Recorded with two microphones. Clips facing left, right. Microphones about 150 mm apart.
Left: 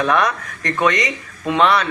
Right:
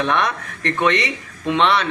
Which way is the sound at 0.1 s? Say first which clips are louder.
Left 3 dB; 25° right (ahead or behind).